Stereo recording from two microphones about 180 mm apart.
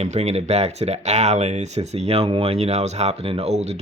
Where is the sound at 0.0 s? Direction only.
40° right (ahead or behind).